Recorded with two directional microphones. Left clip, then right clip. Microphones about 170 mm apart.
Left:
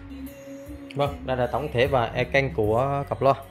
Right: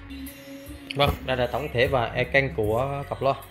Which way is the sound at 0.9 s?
10° left (ahead or behind).